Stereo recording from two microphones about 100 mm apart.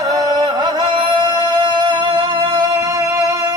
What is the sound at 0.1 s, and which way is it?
Music, 40° right (ahead or behind).